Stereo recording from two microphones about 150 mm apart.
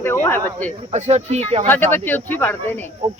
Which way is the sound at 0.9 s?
45° right (ahead or behind).